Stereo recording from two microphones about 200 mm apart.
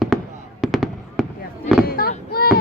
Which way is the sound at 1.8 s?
50° left (ahead or behind).